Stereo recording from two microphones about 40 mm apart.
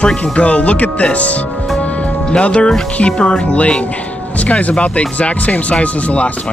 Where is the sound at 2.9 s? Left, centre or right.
Left.